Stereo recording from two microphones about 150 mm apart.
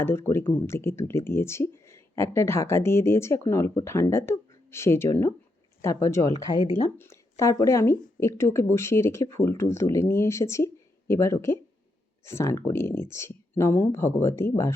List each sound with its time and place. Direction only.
0.0 s speech: 15° left (ahead or behind)
6.7 s speech: 50° left (ahead or behind)
7.0 s speech: 20° left (ahead or behind)